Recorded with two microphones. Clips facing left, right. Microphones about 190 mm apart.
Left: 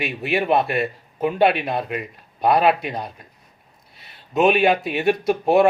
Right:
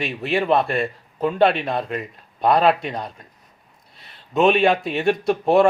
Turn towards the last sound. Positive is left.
turn(degrees=5)  # may be behind; listen again after turning